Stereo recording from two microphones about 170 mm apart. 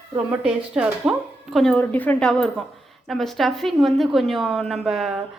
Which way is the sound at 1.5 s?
5° left (ahead or behind).